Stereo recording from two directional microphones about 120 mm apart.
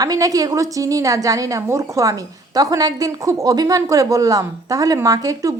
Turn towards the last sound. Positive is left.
turn(degrees=-30)  # may be behind; listen again after turning